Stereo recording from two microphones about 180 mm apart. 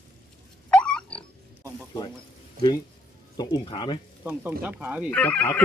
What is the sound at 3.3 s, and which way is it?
Speech, 20° left (ahead or behind).